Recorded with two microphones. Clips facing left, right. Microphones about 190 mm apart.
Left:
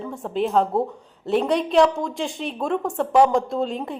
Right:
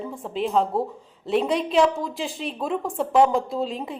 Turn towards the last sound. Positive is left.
turn(degrees=0)  # may be behind; listen again after turning